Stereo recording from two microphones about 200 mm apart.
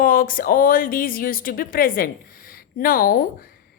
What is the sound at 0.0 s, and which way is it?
A woman's voice, 45° left (ahead or behind).